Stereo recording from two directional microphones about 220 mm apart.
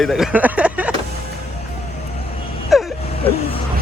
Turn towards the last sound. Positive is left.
turn(degrees=25)  # may be behind; listen again after turning